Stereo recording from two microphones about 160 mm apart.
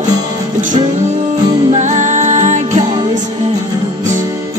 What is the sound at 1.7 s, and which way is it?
Music, 50° right (ahead or behind).